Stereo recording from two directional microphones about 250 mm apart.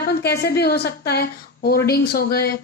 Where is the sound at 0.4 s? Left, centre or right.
Left.